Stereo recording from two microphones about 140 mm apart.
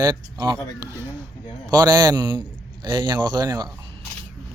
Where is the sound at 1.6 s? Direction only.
30° right (ahead or behind).